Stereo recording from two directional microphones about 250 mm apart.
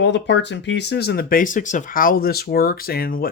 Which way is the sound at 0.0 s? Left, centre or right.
Left.